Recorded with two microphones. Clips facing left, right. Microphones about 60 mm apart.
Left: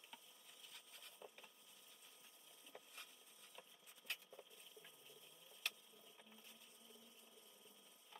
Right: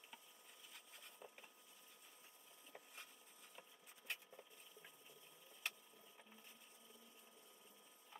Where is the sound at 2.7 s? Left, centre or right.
Centre.